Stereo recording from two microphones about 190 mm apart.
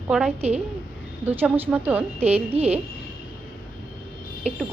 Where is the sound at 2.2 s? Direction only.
35° right (ahead or behind).